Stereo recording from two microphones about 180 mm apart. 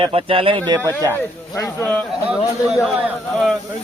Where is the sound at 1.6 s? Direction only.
15° left (ahead or behind).